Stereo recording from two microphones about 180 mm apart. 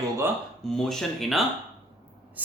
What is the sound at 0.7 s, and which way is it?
Speech, centre (ahead or behind).